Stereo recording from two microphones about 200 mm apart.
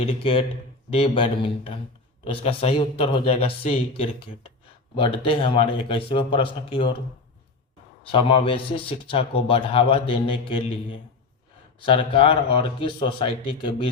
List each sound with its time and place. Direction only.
0.0 s speech: 30° left (ahead or behind)
8.1 s speech: 25° left (ahead or behind)
11.8 s speech: 25° left (ahead or behind)